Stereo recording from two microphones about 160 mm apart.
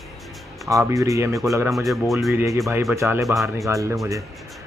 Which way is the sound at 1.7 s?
Centre (ahead or behind).